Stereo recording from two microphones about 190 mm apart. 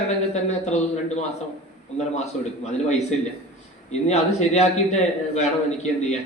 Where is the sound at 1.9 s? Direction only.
35° left (ahead or behind).